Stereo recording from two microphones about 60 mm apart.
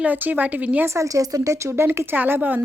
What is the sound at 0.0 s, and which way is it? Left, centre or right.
Speech, right.